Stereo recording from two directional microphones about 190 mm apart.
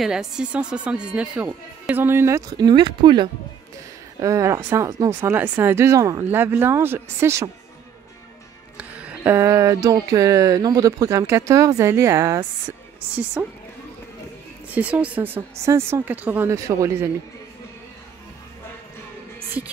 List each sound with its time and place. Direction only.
0.0 s speech: 5° right (ahead or behind)
8.7 s speech: 5° right (ahead or behind)
14.7 s speech: 5° right (ahead or behind)